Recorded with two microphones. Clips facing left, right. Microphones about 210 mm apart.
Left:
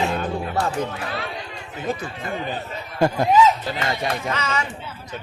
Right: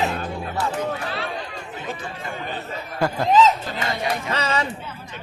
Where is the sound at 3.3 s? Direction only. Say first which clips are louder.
Right 1 dB; 10° left (ahead or behind).